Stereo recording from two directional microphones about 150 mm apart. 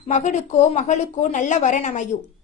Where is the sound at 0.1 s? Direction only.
50° left (ahead or behind).